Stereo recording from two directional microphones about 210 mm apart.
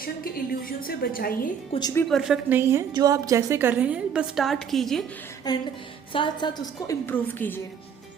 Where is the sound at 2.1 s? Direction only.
Centre (ahead or behind).